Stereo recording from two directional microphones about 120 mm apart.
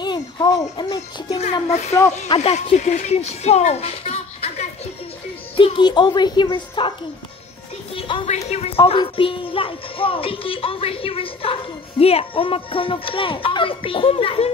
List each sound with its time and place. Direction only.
0.0 s a child's voice: 40° left (ahead or behind)
1.7 s speech: 75° left (ahead or behind)
2.2 s speech: 50° left (ahead or behind)
2.5 s a child's voice: 70° left (ahead or behind)
5.6 s speech: 45° left (ahead or behind)
7.9 s music: 45° left (ahead or behind)
8.5 s speech: 55° left (ahead or behind)